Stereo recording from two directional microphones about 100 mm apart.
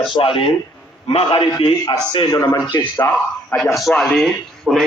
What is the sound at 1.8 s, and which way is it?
Speech, 50° left (ahead or behind).